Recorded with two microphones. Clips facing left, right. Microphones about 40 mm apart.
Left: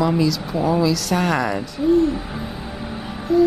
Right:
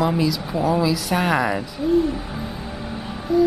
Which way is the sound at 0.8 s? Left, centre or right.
Centre.